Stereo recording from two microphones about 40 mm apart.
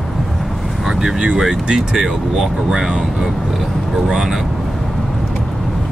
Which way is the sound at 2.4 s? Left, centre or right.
Centre.